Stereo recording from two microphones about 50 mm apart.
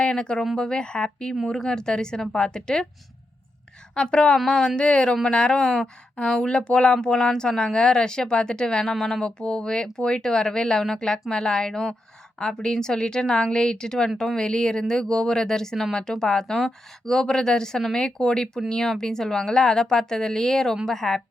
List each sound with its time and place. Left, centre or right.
0.0 s speech: centre
3.9 s speech: centre